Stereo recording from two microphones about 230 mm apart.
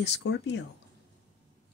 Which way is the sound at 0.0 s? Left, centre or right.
Left.